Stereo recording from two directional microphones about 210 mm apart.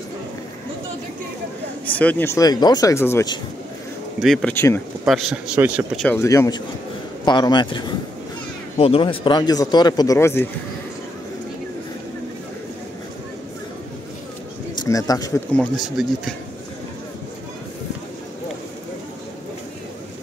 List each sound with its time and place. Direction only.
1.9 s speech: 10° left (ahead or behind)
4.2 s speech: centre (ahead or behind)
5.0 s speech: 5° right (ahead or behind)
6.0 s speech: 15° left (ahead or behind)
14.8 s speech: 15° left (ahead or behind)
15.5 s speech: 5° left (ahead or behind)